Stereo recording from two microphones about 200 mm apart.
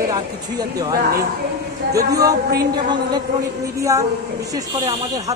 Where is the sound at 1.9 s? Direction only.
15° right (ahead or behind).